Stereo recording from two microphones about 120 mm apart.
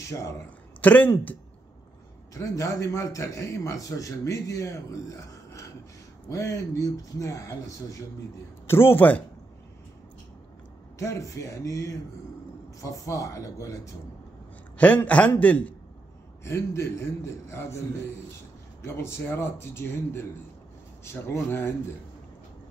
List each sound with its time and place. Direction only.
0.0 s a man's voice: 25° left (ahead or behind)
0.7 s a man's voice: 15° left (ahead or behind)
2.3 s a man's voice: 25° left (ahead or behind)
11.0 s a man's voice: 25° left (ahead or behind)
14.8 s a man's voice: 15° left (ahead or behind)
16.4 s a man's voice: 25° left (ahead or behind)